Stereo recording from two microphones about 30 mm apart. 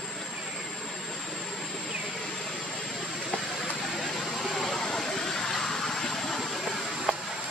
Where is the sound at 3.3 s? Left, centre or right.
Centre.